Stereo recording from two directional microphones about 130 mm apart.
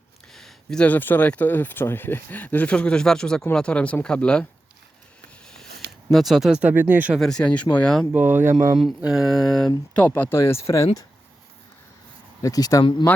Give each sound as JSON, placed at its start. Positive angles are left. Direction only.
{"t": 0.3, "sound": "speech", "side_deg": 5}
{"t": 6.1, "sound": "speech", "side_deg": 0}
{"t": 7.2, "sound": "speech", "side_deg": 5}
{"t": 8.1, "sound": "speech", "side_deg": -15}
{"t": 9.0, "sound": "a sound", "side_deg": -5}
{"t": 9.9, "sound": "speech", "side_deg": 10}
{"t": 12.4, "sound": "speech", "side_deg": 30}